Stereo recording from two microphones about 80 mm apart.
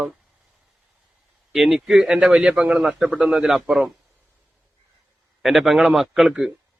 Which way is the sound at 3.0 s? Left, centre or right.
Centre.